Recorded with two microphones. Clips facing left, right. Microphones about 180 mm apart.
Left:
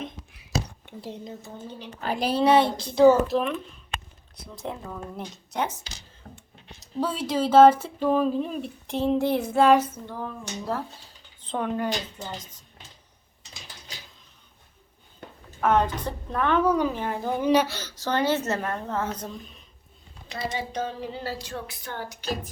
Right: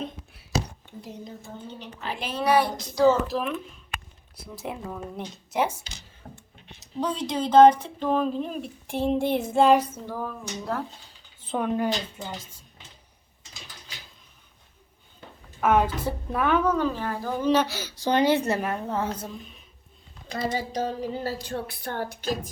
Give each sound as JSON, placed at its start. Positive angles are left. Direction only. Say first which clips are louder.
{"t": 1.9, "sound": "a woman's voice", "louder": "left 7 dB", "side_deg": 45}
{"t": 2.4, "sound": "a woman's voice", "louder": "left 2 dB", "side_deg": 25}
{"t": 3.2, "sound": "speech", "louder": "left 3 dB", "side_deg": 0}
{"t": 4.7, "sound": "a woman's voice", "louder": "right 2 dB", "side_deg": -15}
{"t": 5.1, "sound": "speech", "louder": "right 4 dB", "side_deg": 0}
{"t": 6.7, "sound": "speech", "louder": "even", "side_deg": 5}
{"t": 8.9, "sound": "a woman's voice", "louder": "left 1 dB", "side_deg": -10}
{"t": 9.1, "sound": "child singing", "louder": "left 1 dB", "side_deg": -25}
{"t": 9.6, "sound": "a woman's voice", "louder": "even", "side_deg": -10}
{"t": 11.4, "sound": "a woman's voice", "louder": "right 2 dB", "side_deg": -15}
{"t": 15.6, "sound": "a woman's voice", "louder": "right 1 dB", "side_deg": -5}
{"t": 16.6, "sound": "speech", "louder": "left 1 dB", "side_deg": 15}
{"t": 17.7, "sound": "a woman's voice", "louder": "right 3 dB", "side_deg": -10}
{"t": 20.2, "sound": "speech", "louder": "right 3 dB", "side_deg": -45}